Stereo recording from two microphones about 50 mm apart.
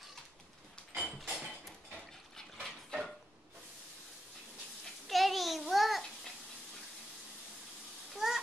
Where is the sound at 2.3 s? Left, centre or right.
Centre.